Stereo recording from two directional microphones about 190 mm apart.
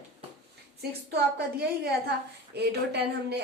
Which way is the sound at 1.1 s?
60° right (ahead or behind).